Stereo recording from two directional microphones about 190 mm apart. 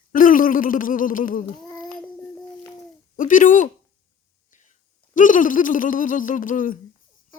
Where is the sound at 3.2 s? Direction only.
45° left (ahead or behind).